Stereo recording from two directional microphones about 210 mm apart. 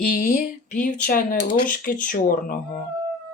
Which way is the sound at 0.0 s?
45° left (ahead or behind).